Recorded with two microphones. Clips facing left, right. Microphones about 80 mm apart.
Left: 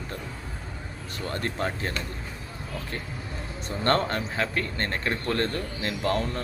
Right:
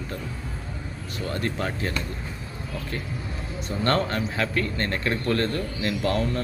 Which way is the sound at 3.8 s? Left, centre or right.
Left.